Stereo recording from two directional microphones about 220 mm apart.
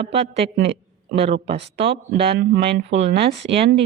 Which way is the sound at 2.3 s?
45° right (ahead or behind).